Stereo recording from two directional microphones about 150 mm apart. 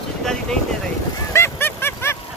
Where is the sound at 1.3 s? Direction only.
15° left (ahead or behind).